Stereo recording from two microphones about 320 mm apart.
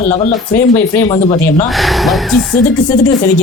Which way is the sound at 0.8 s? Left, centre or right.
Centre.